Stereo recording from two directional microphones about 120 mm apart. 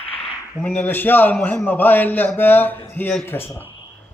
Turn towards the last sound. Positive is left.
turn(degrees=20)  # may be behind; listen again after turning